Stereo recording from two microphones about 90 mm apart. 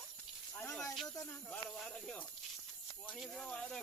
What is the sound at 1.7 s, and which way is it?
Speech, 10° left (ahead or behind).